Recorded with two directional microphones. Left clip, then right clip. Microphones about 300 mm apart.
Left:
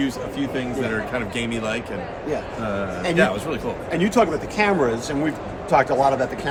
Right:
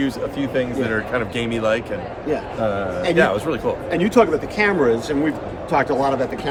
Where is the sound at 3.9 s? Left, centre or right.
Centre.